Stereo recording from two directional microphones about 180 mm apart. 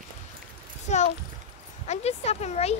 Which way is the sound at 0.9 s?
40° left (ahead or behind).